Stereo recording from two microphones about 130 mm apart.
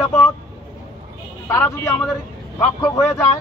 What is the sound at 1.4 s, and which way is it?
A man's voice, 20° left (ahead or behind).